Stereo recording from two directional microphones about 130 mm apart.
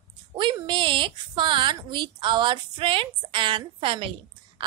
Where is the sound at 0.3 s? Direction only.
40° right (ahead or behind).